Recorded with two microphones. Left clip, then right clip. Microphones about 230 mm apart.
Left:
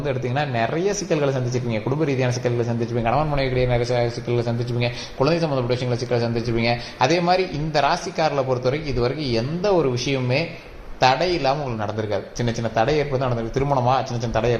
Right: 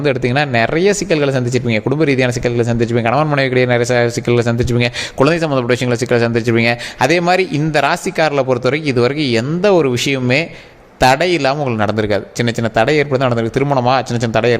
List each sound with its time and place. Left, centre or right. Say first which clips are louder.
0.0 s speech: right 9 dB; right